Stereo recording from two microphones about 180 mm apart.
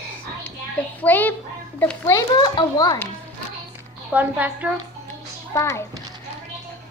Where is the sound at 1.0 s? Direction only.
10° left (ahead or behind); by 3.0 s 25° left (ahead or behind).